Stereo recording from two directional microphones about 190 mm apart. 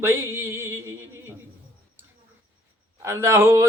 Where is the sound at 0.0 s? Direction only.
15° right (ahead or behind).